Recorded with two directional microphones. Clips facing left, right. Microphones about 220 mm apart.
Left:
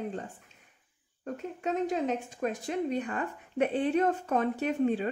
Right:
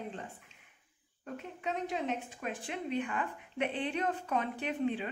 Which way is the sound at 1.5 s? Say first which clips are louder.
Left 6 dB; 45° left (ahead or behind).